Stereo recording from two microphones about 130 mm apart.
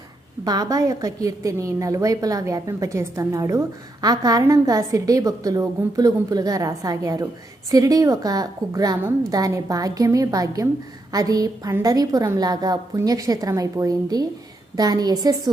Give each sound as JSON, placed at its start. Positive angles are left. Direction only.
{"t": 0.4, "sound": "a woman's voice", "side_deg": -30}